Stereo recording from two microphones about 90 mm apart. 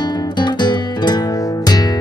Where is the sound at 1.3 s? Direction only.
40° left (ahead or behind).